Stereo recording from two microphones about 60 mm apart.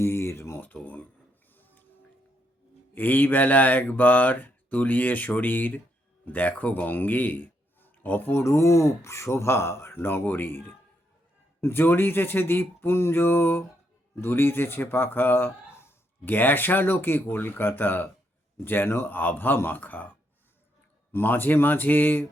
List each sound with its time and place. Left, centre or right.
0.0 s a sound: left
1.5 s music: left
2.9 s a man's voice: left
8.3 s speech: left